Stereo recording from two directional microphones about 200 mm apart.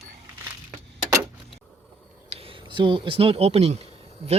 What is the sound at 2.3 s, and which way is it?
Speech, 30° right (ahead or behind).